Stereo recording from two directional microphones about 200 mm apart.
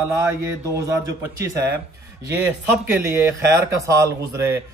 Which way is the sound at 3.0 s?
15° right (ahead or behind).